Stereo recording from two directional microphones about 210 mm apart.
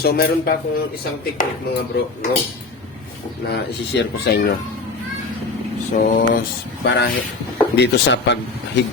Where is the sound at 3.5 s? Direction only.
50° left (ahead or behind).